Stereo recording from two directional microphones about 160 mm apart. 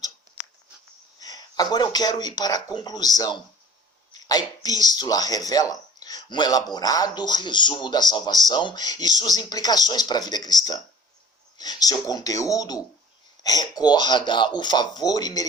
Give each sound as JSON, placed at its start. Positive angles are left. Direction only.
{"t": 1.2, "sound": "speech", "side_deg": 25}